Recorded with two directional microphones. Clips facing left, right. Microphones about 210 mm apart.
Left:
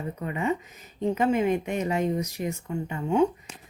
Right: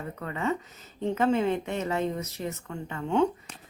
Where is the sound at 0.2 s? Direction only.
15° left (ahead or behind).